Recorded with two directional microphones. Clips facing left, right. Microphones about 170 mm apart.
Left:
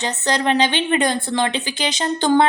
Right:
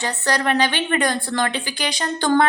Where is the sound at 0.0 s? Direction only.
20° left (ahead or behind).